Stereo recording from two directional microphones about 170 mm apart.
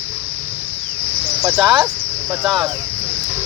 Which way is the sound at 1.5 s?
Centre (ahead or behind).